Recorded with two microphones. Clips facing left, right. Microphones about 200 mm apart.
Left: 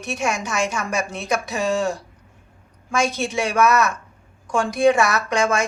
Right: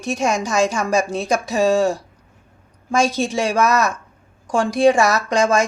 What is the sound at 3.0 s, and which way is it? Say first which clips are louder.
A woman's voice: right 3 dB; 35° right (ahead or behind).